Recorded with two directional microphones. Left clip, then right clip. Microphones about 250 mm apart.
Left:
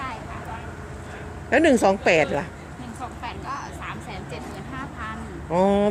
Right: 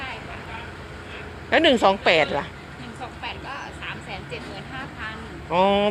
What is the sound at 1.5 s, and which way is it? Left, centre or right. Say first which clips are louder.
Speech: right 1 dB; left.